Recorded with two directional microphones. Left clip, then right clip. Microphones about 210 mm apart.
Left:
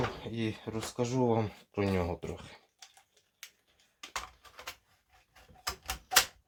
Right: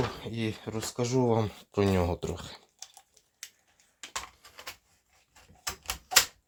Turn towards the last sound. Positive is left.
turn(degrees=-5)  # may be behind; listen again after turning